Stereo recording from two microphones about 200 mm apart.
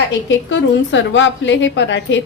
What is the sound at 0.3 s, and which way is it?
A woman's voice, 65° left (ahead or behind).